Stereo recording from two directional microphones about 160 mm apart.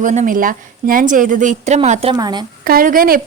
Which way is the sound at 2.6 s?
65° right (ahead or behind).